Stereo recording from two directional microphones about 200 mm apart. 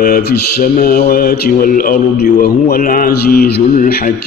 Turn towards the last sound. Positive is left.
turn(degrees=45)  # may be behind; listen again after turning